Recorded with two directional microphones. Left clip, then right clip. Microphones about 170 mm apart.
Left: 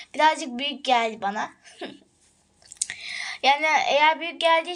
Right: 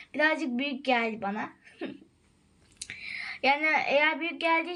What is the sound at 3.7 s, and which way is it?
Speech, 45° left (ahead or behind).